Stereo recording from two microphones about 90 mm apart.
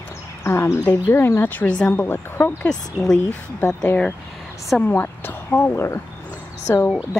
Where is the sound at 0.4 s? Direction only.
30° left (ahead or behind).